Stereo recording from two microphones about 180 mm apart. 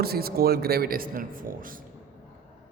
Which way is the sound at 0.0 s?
60° right (ahead or behind).